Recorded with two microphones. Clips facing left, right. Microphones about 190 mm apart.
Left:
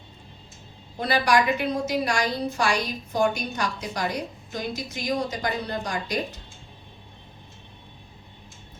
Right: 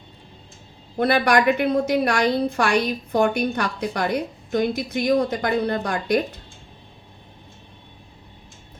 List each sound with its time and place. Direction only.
0.9 s a woman's voice: 60° right (ahead or behind)